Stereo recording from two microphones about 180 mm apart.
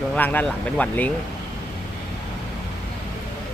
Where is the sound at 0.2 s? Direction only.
10° left (ahead or behind).